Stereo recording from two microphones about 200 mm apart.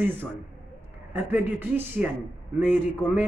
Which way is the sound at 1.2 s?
10° right (ahead or behind).